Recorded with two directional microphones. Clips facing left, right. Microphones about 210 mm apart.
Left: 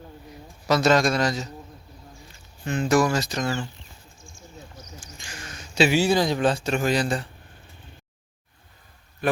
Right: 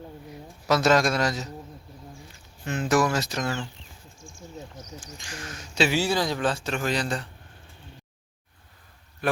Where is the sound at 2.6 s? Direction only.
5° right (ahead or behind).